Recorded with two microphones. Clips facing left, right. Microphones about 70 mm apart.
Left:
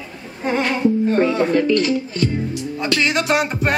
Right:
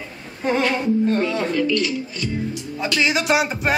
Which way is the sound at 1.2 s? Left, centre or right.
Left.